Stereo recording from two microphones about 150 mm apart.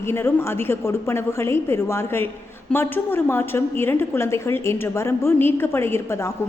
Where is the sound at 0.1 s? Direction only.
15° left (ahead or behind).